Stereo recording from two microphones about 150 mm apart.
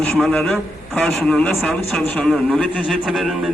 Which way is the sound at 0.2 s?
5° left (ahead or behind).